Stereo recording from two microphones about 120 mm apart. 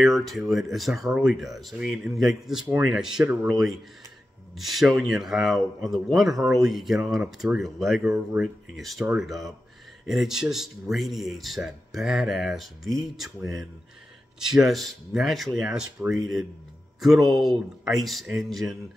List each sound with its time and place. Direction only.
0.0 s speech: centre (ahead or behind)